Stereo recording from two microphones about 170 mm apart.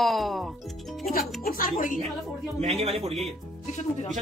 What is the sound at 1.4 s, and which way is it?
Speech, 55° left (ahead or behind).